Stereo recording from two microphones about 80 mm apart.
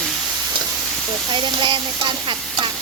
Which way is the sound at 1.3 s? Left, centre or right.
Right.